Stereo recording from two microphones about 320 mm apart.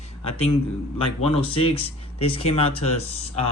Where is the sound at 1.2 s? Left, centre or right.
Centre.